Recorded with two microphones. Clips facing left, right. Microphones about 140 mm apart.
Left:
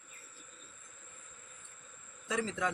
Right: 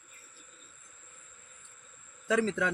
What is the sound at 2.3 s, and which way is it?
Speech, 70° right (ahead or behind).